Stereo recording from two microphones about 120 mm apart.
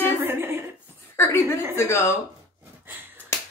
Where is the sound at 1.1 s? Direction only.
20° left (ahead or behind).